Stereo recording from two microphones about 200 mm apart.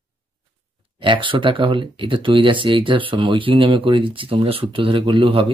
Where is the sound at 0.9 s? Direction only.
25° right (ahead or behind).